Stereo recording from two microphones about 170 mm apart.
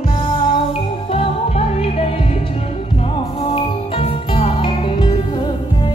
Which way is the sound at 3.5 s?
35° left (ahead or behind).